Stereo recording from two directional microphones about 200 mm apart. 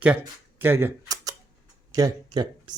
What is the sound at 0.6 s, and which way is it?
Speech, 10° right (ahead or behind).